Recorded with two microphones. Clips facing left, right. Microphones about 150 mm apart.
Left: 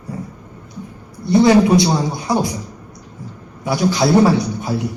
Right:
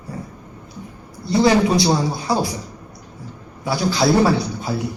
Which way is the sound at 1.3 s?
20° left (ahead or behind).